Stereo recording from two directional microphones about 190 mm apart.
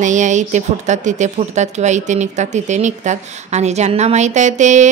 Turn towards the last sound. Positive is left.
turn(degrees=-40)  # may be behind; listen again after turning